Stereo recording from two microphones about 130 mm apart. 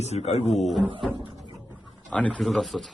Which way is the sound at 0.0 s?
55° left (ahead or behind).